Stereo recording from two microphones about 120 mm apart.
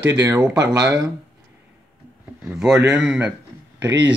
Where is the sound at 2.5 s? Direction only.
5° right (ahead or behind).